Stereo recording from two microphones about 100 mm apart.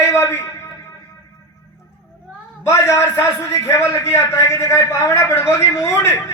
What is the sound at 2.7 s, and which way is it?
A man's voice, 30° left (ahead or behind).